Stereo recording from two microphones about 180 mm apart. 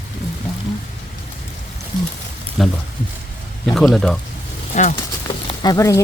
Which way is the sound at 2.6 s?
Centre (ahead or behind).